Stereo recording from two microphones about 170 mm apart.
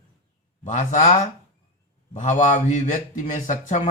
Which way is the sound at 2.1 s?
50° left (ahead or behind).